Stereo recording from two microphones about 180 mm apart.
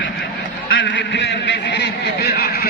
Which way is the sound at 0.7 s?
80° left.